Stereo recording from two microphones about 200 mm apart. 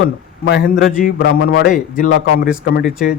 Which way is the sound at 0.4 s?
55° left (ahead or behind).